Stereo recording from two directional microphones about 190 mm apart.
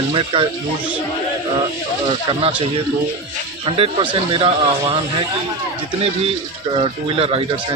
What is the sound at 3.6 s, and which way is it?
Speech, 30° right (ahead or behind).